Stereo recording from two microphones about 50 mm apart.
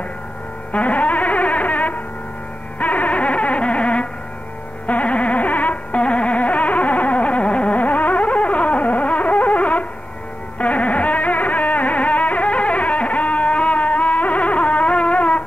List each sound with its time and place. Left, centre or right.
0.7 s music: left
2.8 s a sound: left
10.6 s carnatic music: left